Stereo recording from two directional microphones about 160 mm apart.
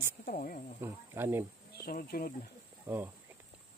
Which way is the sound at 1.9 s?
65° left (ahead or behind).